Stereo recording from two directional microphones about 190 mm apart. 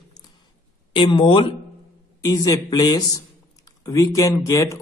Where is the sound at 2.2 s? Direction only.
20° left (ahead or behind).